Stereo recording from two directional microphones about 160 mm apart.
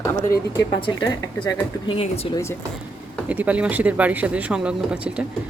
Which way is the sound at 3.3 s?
10° right (ahead or behind).